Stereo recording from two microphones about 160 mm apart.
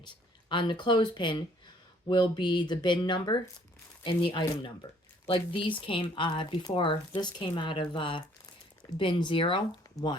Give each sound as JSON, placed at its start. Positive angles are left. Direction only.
{"t": 0.0, "sound": "speech", "side_deg": 30}